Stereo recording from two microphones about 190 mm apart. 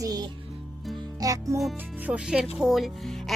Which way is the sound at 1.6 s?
Centre (ahead or behind).